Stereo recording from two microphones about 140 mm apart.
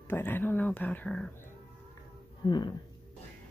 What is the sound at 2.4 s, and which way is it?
Speech, 30° left (ahead or behind).